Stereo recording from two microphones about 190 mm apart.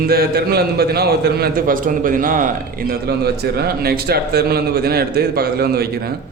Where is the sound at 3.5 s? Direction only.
55° right (ahead or behind).